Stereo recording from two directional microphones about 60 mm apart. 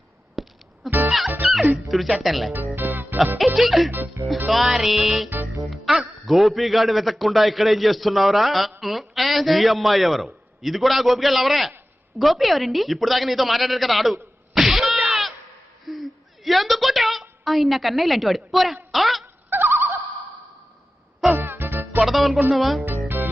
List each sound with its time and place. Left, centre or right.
0.4 s music: centre
0.9 s music: right
1.7 s a man's voice: centre
2.7 s music: right
3.3 s a man's voice: centre
19.5 s turkey: right
21.3 s music: right
22.0 s music: centre
22.5 s a man's voice: centre
22.9 s music: right